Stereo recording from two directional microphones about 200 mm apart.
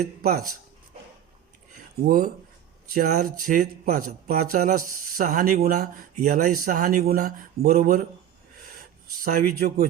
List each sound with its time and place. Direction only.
0.2 s speech: 50° right (ahead or behind)
1.7 s a sound: 45° right (ahead or behind)
2.9 s speech: 45° right (ahead or behind)